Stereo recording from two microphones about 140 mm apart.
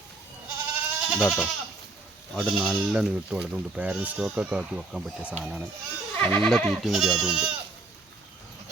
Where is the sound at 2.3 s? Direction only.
Centre (ahead or behind).